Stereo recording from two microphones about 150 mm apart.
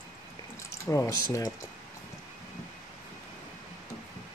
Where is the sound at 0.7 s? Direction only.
20° left (ahead or behind).